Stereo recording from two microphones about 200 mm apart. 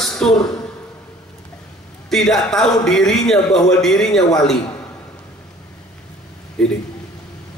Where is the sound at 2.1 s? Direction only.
Centre (ahead or behind).